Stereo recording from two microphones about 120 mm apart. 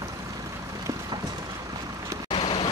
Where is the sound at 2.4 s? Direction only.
45° left (ahead or behind).